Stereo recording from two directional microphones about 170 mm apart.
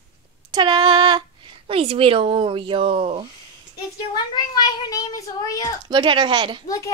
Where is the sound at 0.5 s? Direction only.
25° right (ahead or behind).